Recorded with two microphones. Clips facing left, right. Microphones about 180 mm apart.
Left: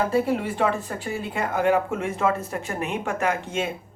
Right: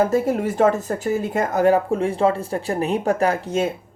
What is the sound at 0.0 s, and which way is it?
Speech, 45° right (ahead or behind).